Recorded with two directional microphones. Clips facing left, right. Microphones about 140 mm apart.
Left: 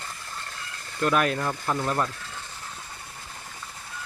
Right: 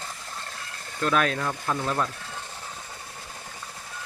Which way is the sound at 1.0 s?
10° left (ahead or behind).